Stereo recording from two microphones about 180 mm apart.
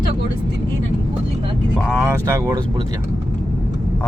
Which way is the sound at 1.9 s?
15° right (ahead or behind).